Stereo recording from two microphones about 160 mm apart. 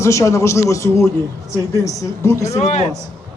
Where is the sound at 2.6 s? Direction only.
45° left (ahead or behind).